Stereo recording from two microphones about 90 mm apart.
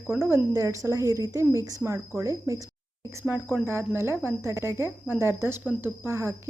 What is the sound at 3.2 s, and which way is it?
Speech, 15° right (ahead or behind).